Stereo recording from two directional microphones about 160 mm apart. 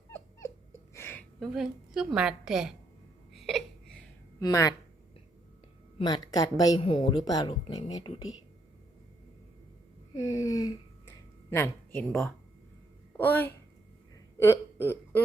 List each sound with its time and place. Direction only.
0.9 s a sound: 15° left (ahead or behind)
1.4 s a woman's voice: centre (ahead or behind)
3.3 s hiccup: centre (ahead or behind)
4.4 s speech: 20° left (ahead or behind)
6.0 s speech: 30° left (ahead or behind)
10.2 s speech: 20° left (ahead or behind)